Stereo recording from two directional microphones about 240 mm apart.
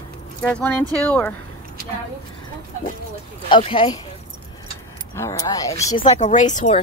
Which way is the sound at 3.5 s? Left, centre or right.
Left.